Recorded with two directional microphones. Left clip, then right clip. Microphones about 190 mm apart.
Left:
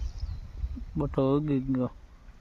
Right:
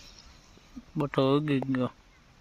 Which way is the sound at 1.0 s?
Centre (ahead or behind).